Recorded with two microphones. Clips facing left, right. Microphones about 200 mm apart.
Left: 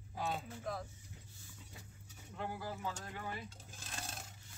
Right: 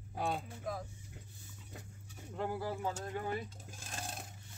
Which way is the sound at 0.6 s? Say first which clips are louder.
Right 1 dB; 10° right (ahead or behind).